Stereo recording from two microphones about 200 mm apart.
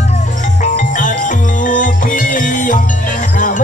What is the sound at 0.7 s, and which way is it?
Music, 40° left (ahead or behind).